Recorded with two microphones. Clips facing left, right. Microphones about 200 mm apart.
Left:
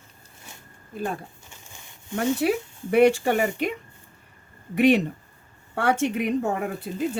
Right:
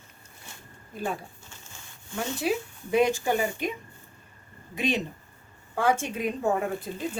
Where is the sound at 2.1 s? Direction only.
60° left (ahead or behind).